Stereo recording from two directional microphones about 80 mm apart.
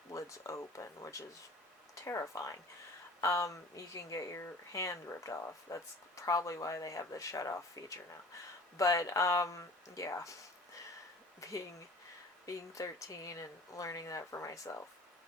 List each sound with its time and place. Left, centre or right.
0.1 s speech: left
11.3 s speech: left